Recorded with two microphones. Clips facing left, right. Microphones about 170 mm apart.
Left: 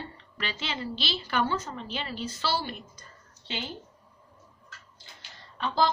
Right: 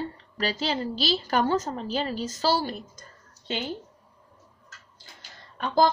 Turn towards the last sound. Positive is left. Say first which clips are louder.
# right 4 dB
turn(degrees=-45)  # may be behind; listen again after turning